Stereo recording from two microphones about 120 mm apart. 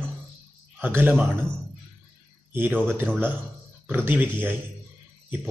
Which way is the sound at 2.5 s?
15° right (ahead or behind).